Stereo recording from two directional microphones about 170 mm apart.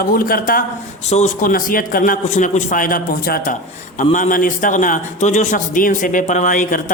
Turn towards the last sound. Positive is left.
turn(degrees=50)  # may be behind; listen again after turning